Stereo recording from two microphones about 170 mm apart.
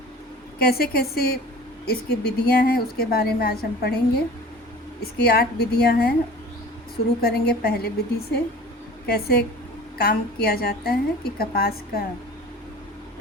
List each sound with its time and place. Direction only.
0.6 s a woman's voice: 65° left (ahead or behind)
5.1 s a woman's voice: 65° left (ahead or behind)
7.2 s a woman's voice: 65° left (ahead or behind)